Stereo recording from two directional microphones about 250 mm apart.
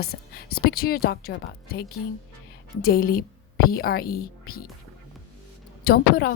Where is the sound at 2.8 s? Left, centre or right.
Left.